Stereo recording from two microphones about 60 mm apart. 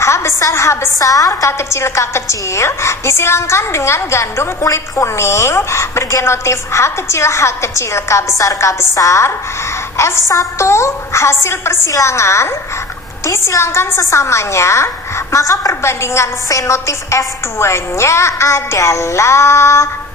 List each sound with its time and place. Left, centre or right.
0.0 s a woman's voice: left
1.3 s a woman's voice: left
11.9 s a woman's voice: left